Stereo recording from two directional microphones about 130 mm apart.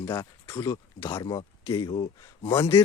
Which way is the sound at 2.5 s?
20° left (ahead or behind).